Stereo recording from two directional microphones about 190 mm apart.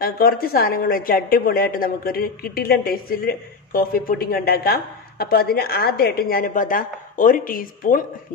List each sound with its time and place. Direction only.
0.0 s a woman's voice: 50° left (ahead or behind)